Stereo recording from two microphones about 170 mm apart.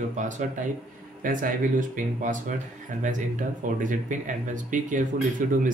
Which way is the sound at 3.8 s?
50° right (ahead or behind).